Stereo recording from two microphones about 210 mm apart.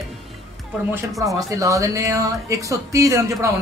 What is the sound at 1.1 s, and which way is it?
A man's voice, 15° right (ahead or behind).